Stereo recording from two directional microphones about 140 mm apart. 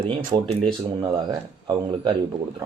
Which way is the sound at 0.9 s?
30° right (ahead or behind).